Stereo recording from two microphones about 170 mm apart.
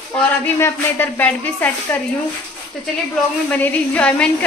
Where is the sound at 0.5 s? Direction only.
15° left (ahead or behind).